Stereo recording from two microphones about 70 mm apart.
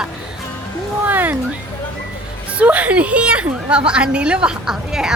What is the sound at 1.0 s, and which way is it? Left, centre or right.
Speech, right.